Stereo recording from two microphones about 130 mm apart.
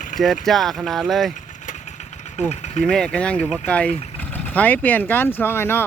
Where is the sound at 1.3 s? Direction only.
70° left (ahead or behind).